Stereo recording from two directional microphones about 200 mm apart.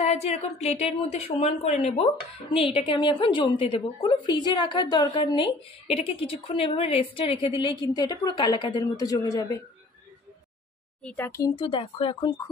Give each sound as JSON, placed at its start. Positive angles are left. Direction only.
{"t": 0.0, "sound": "a woman's voice", "side_deg": 35}
{"t": 11.1, "sound": "speech", "side_deg": 10}
{"t": 11.5, "sound": "a woman's voice", "side_deg": 25}